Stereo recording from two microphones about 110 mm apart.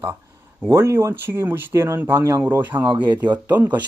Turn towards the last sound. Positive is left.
turn(degrees=-15)  # may be behind; listen again after turning